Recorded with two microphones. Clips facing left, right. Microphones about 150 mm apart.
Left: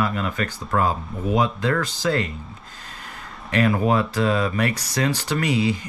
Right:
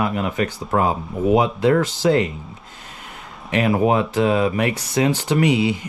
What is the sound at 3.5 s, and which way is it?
Speech, 20° right (ahead or behind).